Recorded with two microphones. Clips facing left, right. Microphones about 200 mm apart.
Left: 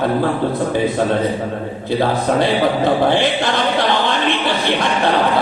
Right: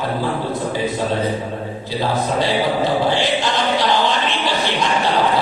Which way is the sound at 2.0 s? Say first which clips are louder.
Left 3 dB; 55° left (ahead or behind).